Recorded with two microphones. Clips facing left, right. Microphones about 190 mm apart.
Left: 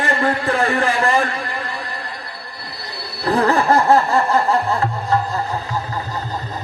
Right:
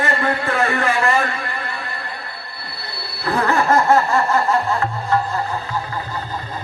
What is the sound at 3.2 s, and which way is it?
Music, 35° left (ahead or behind).